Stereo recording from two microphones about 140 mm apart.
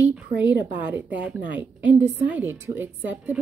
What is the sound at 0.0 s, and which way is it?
A woman's voice, 10° right (ahead or behind).